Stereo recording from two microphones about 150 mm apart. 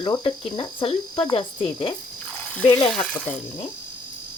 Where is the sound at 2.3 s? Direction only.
10° left (ahead or behind).